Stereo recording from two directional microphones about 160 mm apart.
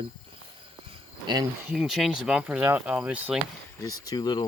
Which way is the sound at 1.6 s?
5° right (ahead or behind).